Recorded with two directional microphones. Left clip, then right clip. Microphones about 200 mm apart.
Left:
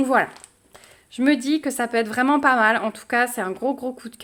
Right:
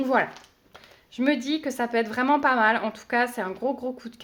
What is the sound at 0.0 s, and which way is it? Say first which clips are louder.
A woman's voice: left 4 dB; 25° left (ahead or behind).